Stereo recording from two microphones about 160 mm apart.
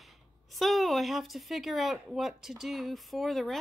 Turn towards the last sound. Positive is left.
turn(degrees=0)  # may be behind; listen again after turning